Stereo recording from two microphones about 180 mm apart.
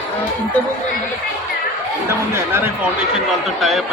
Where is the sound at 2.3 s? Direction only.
10° right (ahead or behind).